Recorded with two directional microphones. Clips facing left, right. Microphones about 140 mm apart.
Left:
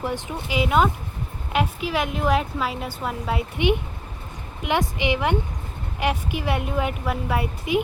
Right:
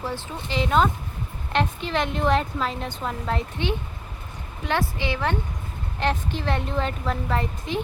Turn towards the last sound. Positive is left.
turn(degrees=10)  # may be behind; listen again after turning